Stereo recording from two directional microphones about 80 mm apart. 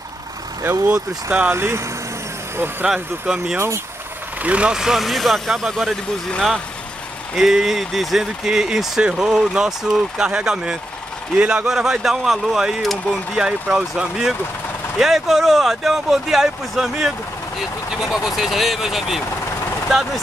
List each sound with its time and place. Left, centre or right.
0.8 s speech: centre
1.5 s speech: right
2.9 s speech: centre
3.5 s speech: right
4.4 s speech: centre
7.3 s speech: centre